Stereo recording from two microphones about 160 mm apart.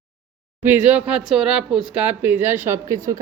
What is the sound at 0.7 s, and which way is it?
Speech, 10° right (ahead or behind).